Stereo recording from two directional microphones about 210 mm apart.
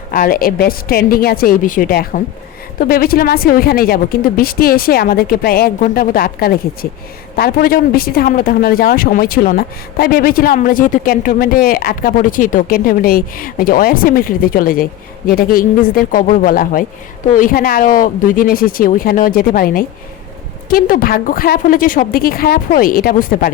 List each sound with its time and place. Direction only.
0.1 s speech: 45° left (ahead or behind)